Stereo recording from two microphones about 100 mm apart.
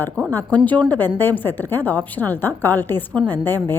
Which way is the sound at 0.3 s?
15° left (ahead or behind).